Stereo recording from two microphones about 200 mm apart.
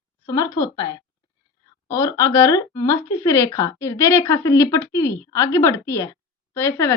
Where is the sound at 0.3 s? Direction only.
15° left (ahead or behind).